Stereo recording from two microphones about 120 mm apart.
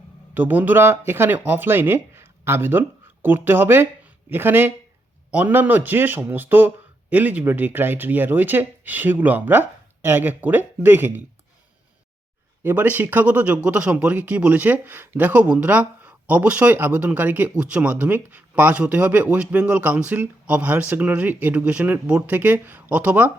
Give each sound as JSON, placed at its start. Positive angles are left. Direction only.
{"t": 0.3, "sound": "speech", "side_deg": -15}
{"t": 12.6, "sound": "speech", "side_deg": -15}